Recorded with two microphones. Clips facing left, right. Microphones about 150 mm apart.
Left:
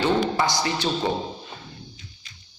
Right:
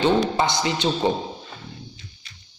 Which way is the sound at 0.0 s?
20° right (ahead or behind).